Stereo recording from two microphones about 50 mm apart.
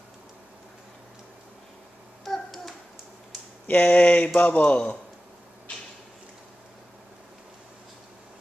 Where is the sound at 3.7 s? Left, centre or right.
Left.